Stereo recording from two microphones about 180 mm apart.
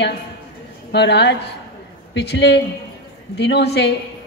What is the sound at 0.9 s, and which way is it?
A woman's voice, 75° left (ahead or behind).